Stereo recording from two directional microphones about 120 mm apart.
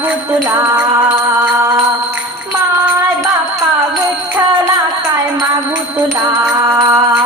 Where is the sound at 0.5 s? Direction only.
15° right (ahead or behind).